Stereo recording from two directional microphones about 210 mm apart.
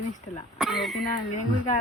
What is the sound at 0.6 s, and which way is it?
Speech, centre (ahead or behind).